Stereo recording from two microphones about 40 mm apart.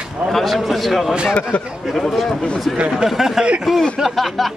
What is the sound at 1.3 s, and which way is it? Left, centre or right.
Speech, left.